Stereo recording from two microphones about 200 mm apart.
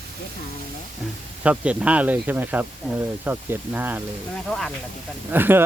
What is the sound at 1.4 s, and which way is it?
Speech, 5° right (ahead or behind).